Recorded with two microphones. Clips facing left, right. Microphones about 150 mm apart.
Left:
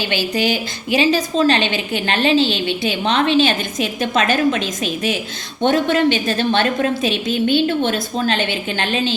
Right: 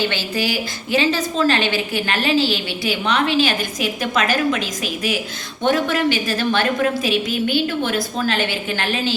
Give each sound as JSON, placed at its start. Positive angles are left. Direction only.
{"t": 0.1, "sound": "a woman's voice", "side_deg": 15}